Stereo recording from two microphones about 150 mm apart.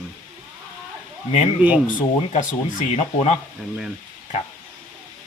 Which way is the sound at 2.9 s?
50° left (ahead or behind).